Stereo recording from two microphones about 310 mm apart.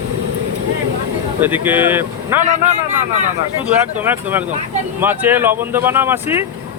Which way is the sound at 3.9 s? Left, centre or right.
Centre.